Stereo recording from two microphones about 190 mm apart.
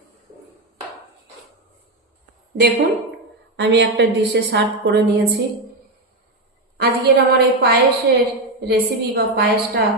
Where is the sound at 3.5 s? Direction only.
70° right (ahead or behind).